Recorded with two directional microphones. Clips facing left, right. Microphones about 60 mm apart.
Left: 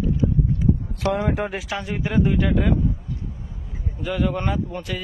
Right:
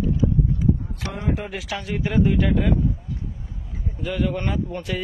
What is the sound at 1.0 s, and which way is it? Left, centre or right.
Speech, left.